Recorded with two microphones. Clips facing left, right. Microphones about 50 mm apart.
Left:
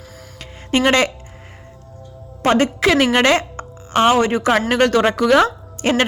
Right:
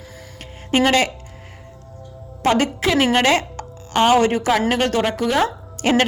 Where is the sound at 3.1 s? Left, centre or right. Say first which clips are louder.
Left 2 dB; left.